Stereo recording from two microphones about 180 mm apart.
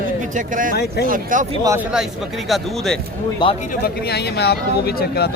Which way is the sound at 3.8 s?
65° left (ahead or behind).